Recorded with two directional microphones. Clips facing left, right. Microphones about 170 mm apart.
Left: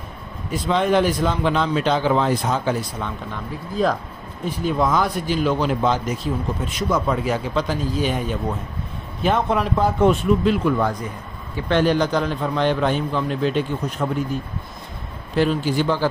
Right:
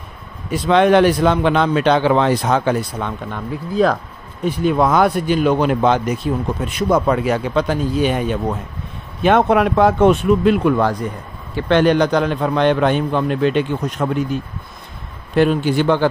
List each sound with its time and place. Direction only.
0.5 s a man's voice: 75° right (ahead or behind)
3.8 s a man's voice: 75° right (ahead or behind)
15.3 s speech: 60° right (ahead or behind)